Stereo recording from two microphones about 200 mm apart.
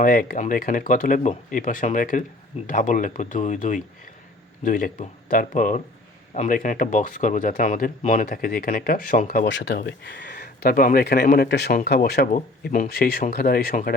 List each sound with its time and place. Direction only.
0.0 s speech: 45° left (ahead or behind)
9.5 s speech: 65° left (ahead or behind)